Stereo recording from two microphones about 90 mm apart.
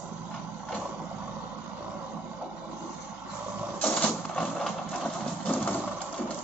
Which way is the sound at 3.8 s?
15° left (ahead or behind).